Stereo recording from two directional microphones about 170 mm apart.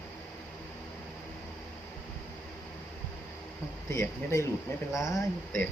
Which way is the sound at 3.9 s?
15° left (ahead or behind).